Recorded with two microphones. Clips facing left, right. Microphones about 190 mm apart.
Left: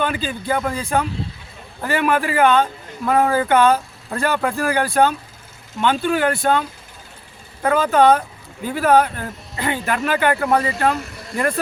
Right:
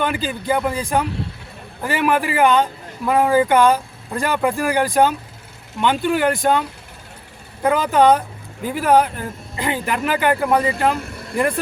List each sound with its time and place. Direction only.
0.0 s speech: 15° right (ahead or behind)
11.0 s vehicle: 55° right (ahead or behind)